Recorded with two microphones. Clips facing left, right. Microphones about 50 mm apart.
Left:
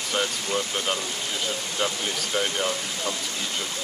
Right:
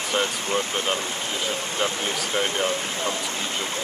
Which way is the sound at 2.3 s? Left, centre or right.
Centre.